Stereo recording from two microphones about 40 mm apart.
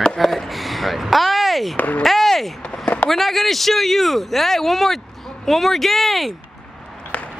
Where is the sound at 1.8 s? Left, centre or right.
Left.